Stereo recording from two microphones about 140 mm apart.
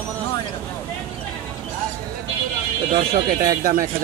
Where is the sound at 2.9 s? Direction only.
90° right.